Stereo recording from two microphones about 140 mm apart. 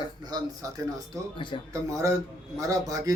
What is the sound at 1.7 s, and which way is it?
Speech, 20° right (ahead or behind).